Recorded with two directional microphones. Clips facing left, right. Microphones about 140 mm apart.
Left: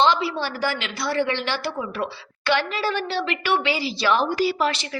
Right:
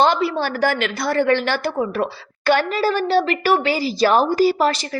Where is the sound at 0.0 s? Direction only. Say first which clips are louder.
Right 3 dB; 50° right (ahead or behind).